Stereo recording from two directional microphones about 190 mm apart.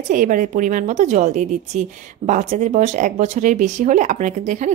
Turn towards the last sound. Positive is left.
turn(degrees=-40)  # may be behind; listen again after turning